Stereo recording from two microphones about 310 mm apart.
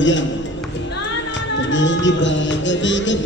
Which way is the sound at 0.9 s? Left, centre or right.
Left.